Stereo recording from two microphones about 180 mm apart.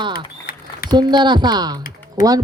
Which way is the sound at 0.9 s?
25° right (ahead or behind).